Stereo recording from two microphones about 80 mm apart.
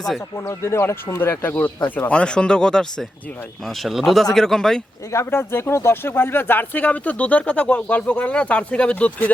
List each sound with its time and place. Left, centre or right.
0.3 s speech: left
2.0 s speech: centre
5.1 s speech: left